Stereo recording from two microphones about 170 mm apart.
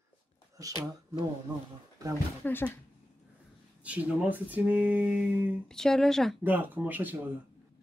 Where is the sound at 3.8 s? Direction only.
10° right (ahead or behind).